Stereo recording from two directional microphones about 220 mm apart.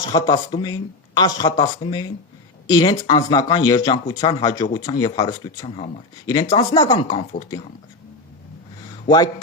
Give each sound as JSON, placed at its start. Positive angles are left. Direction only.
{"t": 0.0, "sound": "speech", "side_deg": 15}
{"t": 9.0, "sound": "speech", "side_deg": 15}